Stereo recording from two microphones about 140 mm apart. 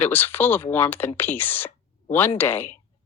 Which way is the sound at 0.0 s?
15° left (ahead or behind).